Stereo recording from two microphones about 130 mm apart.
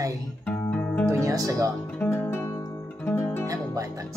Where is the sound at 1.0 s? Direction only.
25° right (ahead or behind).